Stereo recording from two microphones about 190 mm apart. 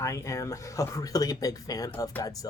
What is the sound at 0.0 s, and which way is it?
Speech, 15° left (ahead or behind).